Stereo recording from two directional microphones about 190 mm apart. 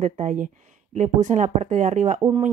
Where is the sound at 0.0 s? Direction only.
40° right (ahead or behind).